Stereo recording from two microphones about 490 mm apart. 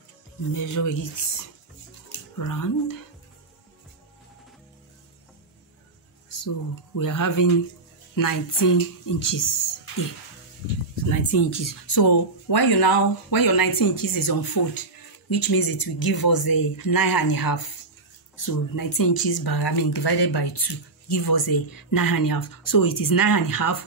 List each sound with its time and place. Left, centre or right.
0.6 s speech: left
2.3 s speech: left
6.2 s speech: left
11.0 s speech: left